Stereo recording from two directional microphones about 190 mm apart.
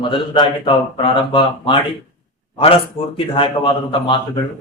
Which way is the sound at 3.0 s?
30° left (ahead or behind).